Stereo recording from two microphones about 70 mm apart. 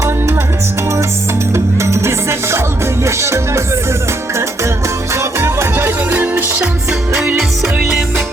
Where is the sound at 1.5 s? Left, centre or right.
Right.